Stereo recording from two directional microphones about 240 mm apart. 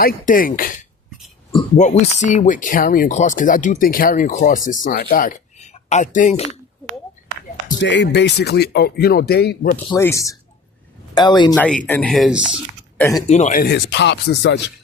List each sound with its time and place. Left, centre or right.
0.0 s speech: left
7.8 s speech: left
9.7 s speech: centre
11.5 s speech: centre
13.0 s speech: centre
13.2 s speech: left